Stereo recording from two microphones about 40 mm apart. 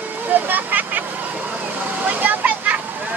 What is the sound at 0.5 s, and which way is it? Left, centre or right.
Speech, right.